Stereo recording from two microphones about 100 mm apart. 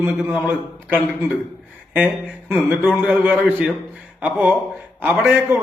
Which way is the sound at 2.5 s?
15° right (ahead or behind).